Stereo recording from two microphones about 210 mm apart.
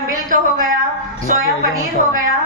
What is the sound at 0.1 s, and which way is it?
Speech, 40° right (ahead or behind).